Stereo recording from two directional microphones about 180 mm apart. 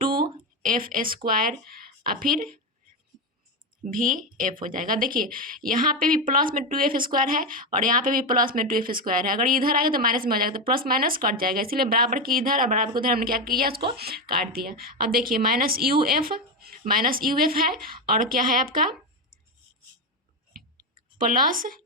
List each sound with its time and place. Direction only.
0.0 s a sound: 55° right (ahead or behind)
0.9 s speech: 50° right (ahead or behind)
3.8 s speech: 45° right (ahead or behind)
21.2 s speech: 50° right (ahead or behind)